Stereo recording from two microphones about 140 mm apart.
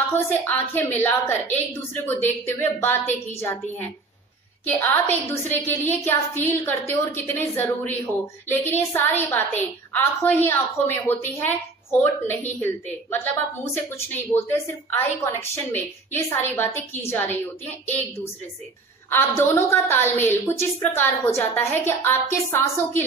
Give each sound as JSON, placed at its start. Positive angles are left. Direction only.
{"t": 0.1, "sound": "a woman's voice", "side_deg": 15}
{"t": 19.0, "sound": "a woman's voice", "side_deg": 15}